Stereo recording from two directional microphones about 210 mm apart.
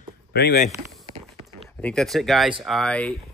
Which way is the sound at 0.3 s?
50° left (ahead or behind).